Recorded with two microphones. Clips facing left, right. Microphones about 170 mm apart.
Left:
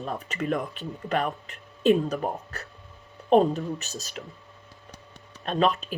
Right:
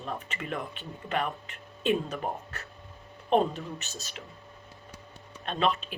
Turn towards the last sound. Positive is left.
turn(degrees=40)  # may be behind; listen again after turning